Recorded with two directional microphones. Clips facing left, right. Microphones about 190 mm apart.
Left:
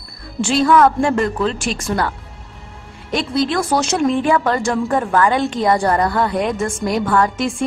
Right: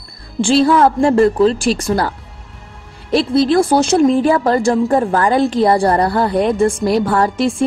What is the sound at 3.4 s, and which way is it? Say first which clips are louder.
A woman's voice: right 6 dB; 30° right (ahead or behind).